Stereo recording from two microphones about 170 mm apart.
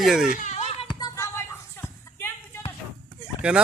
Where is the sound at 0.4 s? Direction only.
40° left (ahead or behind).